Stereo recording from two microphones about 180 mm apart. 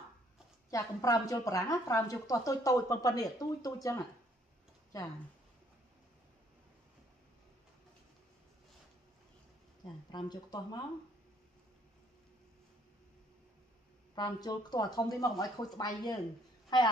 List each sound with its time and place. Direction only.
0.7 s a woman's voice: 20° left (ahead or behind)
10.1 s a woman's voice: 25° left (ahead or behind)
14.1 s a woman's voice: 25° left (ahead or behind)